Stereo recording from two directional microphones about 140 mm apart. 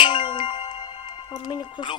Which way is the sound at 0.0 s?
35° left (ahead or behind).